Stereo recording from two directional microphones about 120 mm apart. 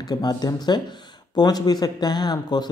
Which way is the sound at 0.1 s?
35° left (ahead or behind).